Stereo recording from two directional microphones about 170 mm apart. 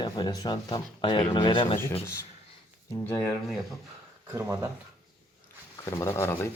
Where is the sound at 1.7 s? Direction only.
15° left (ahead or behind).